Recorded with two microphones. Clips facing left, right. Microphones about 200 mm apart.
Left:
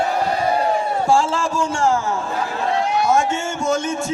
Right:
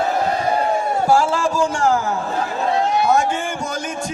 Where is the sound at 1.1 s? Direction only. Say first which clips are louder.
Right 1 dB; 25° left (ahead or behind).